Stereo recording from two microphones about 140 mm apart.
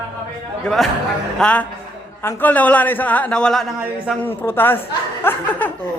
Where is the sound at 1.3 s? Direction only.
5° left (ahead or behind).